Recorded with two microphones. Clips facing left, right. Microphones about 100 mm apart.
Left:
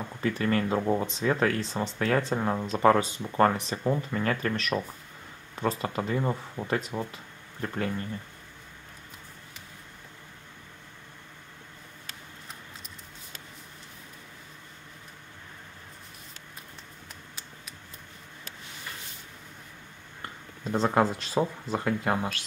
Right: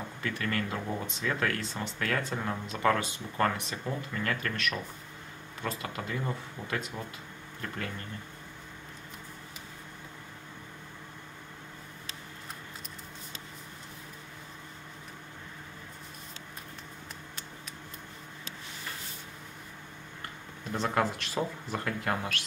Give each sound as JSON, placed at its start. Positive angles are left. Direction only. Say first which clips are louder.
{"t": 0.2, "sound": "speech", "louder": "left 7 dB", "side_deg": 30}
{"t": 20.7, "sound": "speech", "louder": "left 5 dB", "side_deg": 30}